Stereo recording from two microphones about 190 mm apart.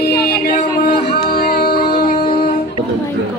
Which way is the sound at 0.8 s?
55° left (ahead or behind).